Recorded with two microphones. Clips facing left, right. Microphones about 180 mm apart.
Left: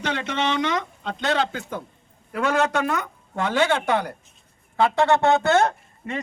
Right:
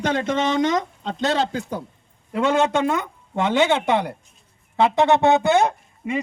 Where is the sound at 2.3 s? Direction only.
25° right (ahead or behind).